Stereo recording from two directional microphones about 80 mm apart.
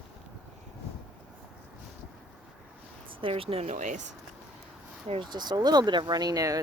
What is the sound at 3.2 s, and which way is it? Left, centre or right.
Speech, right.